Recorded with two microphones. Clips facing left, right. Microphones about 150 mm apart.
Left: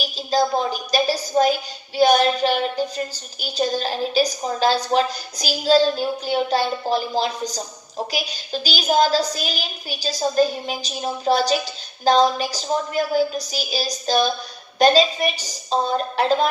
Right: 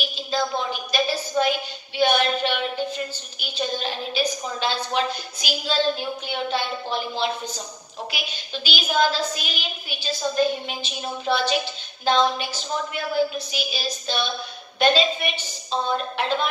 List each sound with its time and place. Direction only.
0.0 s a woman's voice: 40° left (ahead or behind)